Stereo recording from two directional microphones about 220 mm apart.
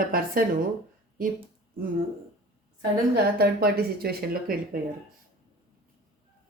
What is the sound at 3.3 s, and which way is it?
Speech, 45° right (ahead or behind).